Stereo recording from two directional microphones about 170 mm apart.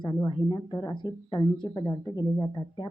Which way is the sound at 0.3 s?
25° left (ahead or behind).